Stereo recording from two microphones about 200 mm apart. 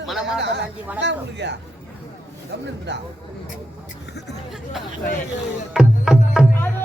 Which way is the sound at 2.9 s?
60° right (ahead or behind).